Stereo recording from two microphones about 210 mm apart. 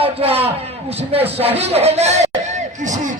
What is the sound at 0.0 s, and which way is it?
A man's voice, 25° right (ahead or behind).